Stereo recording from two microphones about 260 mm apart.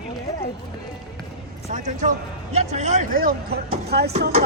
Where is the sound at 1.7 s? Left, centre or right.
Right.